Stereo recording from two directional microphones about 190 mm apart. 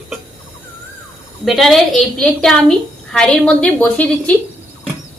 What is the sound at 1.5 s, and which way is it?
A woman's voice, centre (ahead or behind).